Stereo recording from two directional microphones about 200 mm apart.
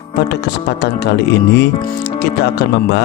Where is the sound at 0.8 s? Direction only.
60° left (ahead or behind).